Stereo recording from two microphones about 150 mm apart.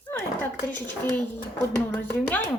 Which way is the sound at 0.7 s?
10° left (ahead or behind).